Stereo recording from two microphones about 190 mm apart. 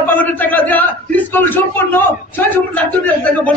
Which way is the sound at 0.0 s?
10° left (ahead or behind).